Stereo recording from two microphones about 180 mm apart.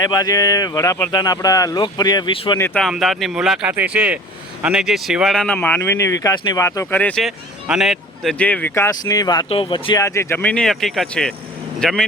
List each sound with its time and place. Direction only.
0.0 s speech: 20° left (ahead or behind)
2.6 s speech: 10° left (ahead or behind); by 10.0 s 30° left (ahead or behind)
10.0 s speech: 15° left (ahead or behind)